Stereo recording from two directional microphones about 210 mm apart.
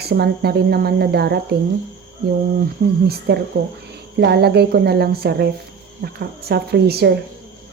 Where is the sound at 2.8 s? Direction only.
45° right (ahead or behind).